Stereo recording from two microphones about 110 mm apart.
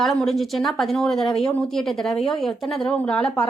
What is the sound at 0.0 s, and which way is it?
Speech, 5° left (ahead or behind).